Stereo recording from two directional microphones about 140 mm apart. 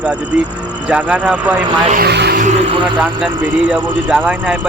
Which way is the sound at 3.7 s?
5° right (ahead or behind).